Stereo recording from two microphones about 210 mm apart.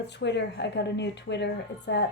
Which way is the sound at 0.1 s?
55° left (ahead or behind).